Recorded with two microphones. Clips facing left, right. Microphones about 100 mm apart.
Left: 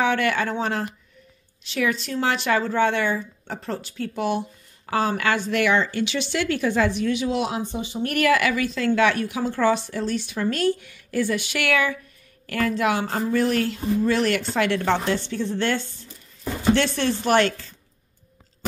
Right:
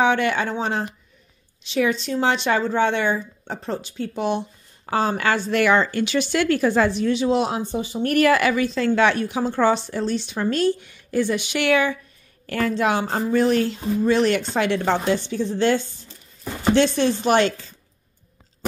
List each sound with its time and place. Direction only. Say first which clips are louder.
0.0 s speech: right 2 dB; 20° right (ahead or behind)